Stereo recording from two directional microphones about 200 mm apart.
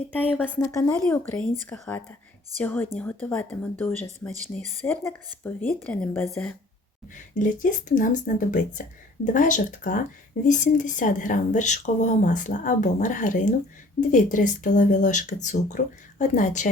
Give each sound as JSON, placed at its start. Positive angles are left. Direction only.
{"t": 0.6, "sound": "speech", "side_deg": 15}
{"t": 7.3, "sound": "a woman's voice", "side_deg": 40}